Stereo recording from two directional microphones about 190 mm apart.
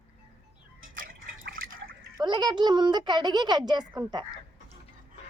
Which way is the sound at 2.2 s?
25° right (ahead or behind).